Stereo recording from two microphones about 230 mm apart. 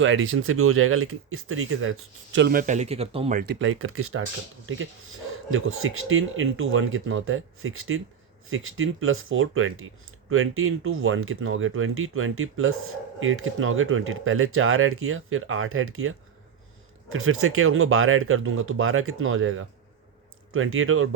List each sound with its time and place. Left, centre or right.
0.0 s speech: right
2.5 s speech: right
3.3 s speech: right